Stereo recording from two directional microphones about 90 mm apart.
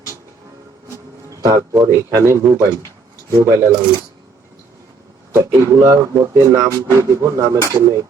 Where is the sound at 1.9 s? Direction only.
35° right (ahead or behind).